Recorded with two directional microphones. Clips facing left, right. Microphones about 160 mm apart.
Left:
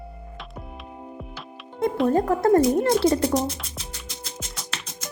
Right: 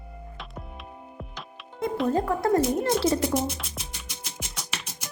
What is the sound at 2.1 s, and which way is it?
Speech, 50° left (ahead or behind).